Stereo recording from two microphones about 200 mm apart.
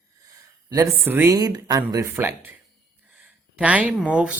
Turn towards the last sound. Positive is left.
turn(degrees=-5)  # may be behind; listen again after turning